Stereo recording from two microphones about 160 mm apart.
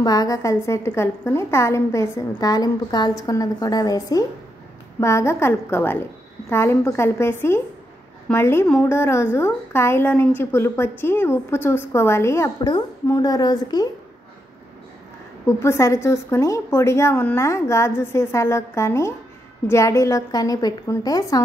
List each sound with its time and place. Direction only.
0.0 s a woman's voice: 25° left (ahead or behind)
15.4 s a woman's voice: 15° left (ahead or behind)